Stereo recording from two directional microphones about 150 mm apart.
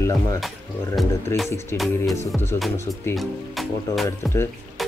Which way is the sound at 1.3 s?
20° left (ahead or behind).